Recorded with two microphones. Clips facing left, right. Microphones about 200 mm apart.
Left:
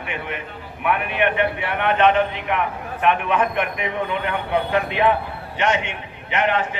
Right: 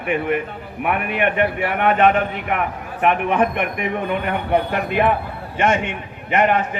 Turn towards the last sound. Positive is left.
turn(degrees=-50)  # may be behind; listen again after turning